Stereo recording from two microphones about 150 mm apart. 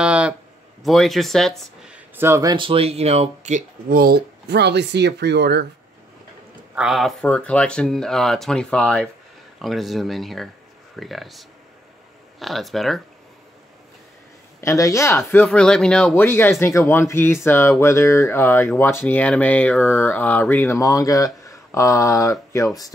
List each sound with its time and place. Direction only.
0.0 s a sound: 5° right (ahead or behind)
0.8 s speech: centre (ahead or behind)
2.1 s speech: 20° right (ahead or behind)
2.5 s speech: 35° right (ahead or behind); by 4.0 s 55° right (ahead or behind)
4.0 s speech: 90° right
6.7 s speech: 5° right (ahead or behind)
14.6 s speech: 20° left (ahead or behind)